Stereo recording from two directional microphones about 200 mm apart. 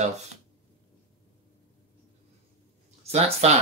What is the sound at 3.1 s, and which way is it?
Speech, 30° right (ahead or behind).